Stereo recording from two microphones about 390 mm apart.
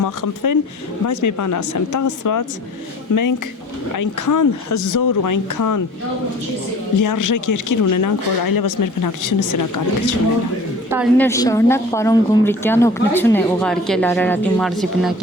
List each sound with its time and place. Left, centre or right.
0.0 s speech: left
7.0 s speech: left
10.9 s a woman's voice: centre